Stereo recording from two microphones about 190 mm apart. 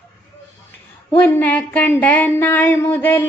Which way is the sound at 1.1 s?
10° left (ahead or behind).